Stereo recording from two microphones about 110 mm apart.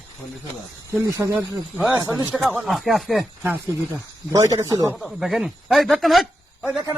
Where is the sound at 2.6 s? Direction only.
Centre (ahead or behind).